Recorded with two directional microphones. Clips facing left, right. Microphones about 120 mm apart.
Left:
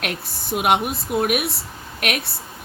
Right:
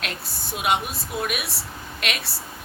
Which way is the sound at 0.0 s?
55° left (ahead or behind).